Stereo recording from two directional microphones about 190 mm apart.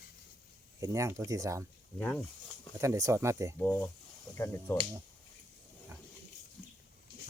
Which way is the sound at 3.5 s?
10° left (ahead or behind).